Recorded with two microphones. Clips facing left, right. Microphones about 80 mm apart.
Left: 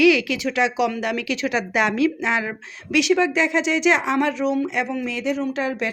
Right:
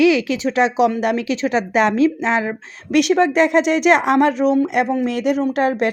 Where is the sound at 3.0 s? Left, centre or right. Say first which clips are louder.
Right 4 dB; right.